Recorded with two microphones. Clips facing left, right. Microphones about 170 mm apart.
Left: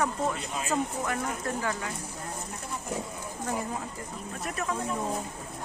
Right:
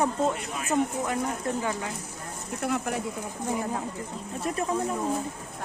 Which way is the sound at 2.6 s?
75° right (ahead or behind).